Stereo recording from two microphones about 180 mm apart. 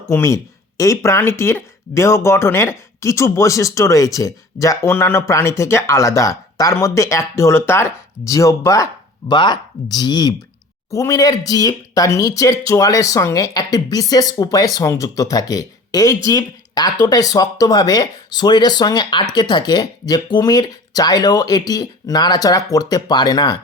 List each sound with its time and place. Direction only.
0.1 s speech: 15° left (ahead or behind)